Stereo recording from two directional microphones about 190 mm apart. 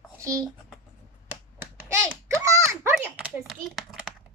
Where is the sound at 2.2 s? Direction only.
15° right (ahead or behind).